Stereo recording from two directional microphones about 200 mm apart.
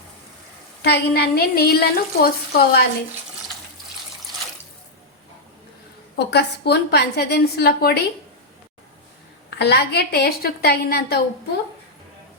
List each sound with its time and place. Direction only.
0.8 s a woman's voice: 55° left (ahead or behind)
6.1 s a woman's voice: 55° left (ahead or behind)
9.6 s a woman's voice: 55° left (ahead or behind)